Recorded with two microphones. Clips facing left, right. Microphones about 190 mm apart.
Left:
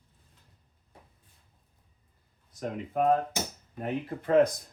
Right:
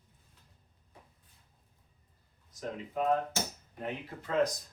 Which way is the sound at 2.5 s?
60° left (ahead or behind).